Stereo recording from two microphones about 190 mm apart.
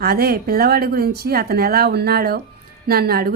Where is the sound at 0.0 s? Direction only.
55° right (ahead or behind).